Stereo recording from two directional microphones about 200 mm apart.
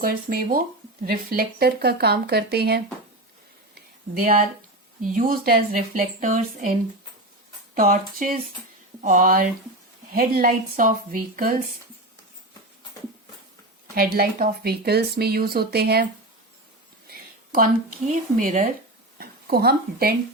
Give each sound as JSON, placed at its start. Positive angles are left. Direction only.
{"t": 0.0, "sound": "speech", "side_deg": -45}
{"t": 4.1, "sound": "speech", "side_deg": -45}
{"t": 7.8, "sound": "speech", "side_deg": -45}
{"t": 13.9, "sound": "speech", "side_deg": -50}
{"t": 17.1, "sound": "a sound", "side_deg": -50}
{"t": 18.1, "sound": "speech", "side_deg": -40}